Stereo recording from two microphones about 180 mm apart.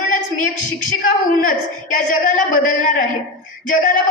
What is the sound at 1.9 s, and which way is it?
A woman's voice, 45° left (ahead or behind).